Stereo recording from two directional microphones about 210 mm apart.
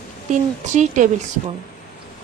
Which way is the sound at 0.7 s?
35° right (ahead or behind).